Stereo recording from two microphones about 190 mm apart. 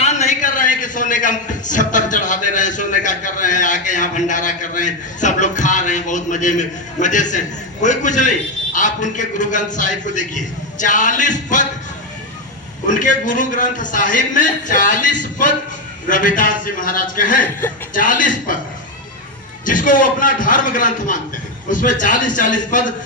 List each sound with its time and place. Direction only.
0.0 s a man's voice: 35° left (ahead or behind)
12.9 s a man's voice: 40° left (ahead or behind)
19.6 s a man's voice: 45° left (ahead or behind)